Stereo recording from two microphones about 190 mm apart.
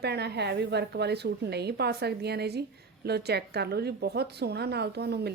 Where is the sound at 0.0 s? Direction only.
60° right (ahead or behind).